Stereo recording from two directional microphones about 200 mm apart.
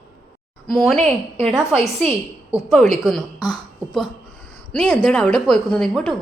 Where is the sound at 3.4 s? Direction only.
20° left (ahead or behind).